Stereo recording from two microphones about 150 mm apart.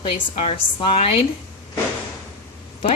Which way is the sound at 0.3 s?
40° left (ahead or behind).